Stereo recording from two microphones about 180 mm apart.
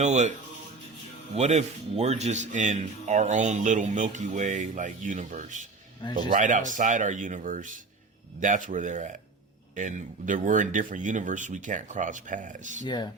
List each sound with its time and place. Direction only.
0.0 s speech: 40° right (ahead or behind)
1.4 s speech: 40° right (ahead or behind)
12.8 s speech: 25° left (ahead or behind)